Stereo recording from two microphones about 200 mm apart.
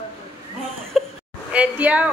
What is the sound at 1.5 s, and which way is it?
Speech, 5° right (ahead or behind).